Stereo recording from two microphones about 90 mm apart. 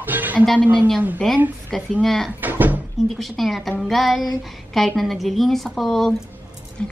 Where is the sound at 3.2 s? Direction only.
Centre (ahead or behind).